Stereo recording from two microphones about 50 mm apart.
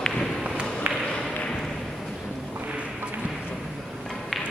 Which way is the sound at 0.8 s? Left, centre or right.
Right.